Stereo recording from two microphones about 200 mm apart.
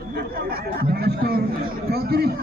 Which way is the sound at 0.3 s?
50° right (ahead or behind).